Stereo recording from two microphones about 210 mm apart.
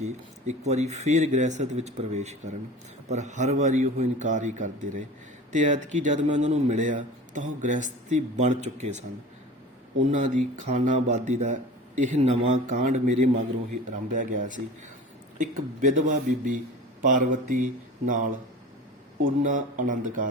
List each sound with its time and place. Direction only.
0.0 s a man's voice: 35° right (ahead or behind)
10.1 s a man's voice: 35° right (ahead or behind)